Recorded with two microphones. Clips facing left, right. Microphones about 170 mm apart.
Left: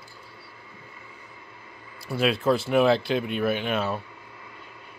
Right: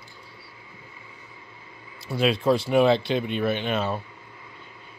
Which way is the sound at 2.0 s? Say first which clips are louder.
Right 1 dB; 5° left (ahead or behind).